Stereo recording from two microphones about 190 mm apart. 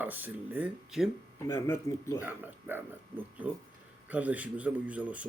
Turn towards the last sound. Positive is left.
turn(degrees=-5)  # may be behind; listen again after turning